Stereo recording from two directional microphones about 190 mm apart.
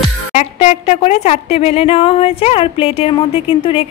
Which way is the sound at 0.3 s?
35° left (ahead or behind).